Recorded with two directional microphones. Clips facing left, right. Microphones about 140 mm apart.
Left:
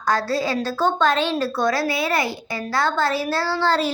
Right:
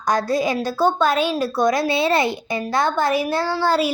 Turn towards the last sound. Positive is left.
turn(degrees=-10)  # may be behind; listen again after turning